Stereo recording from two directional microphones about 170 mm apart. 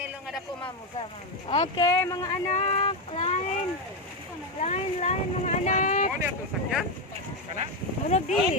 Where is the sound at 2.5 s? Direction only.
40° left (ahead or behind).